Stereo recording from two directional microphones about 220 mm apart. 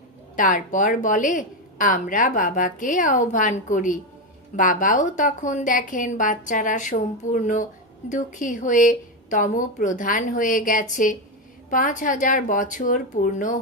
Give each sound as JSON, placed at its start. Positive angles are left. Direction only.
{"t": 0.4, "sound": "a woman's voice", "side_deg": 35}